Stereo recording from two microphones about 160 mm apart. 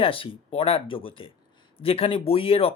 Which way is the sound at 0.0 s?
35° left (ahead or behind).